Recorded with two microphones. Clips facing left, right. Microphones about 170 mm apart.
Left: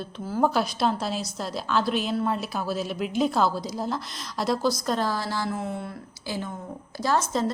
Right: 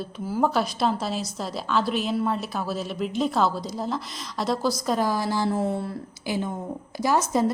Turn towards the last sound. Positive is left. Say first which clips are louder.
# right 3 dB
turn(degrees=-10)  # may be behind; listen again after turning